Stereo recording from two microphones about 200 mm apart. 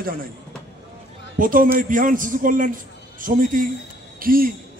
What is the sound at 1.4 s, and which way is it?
A man's voice, 45° right (ahead or behind).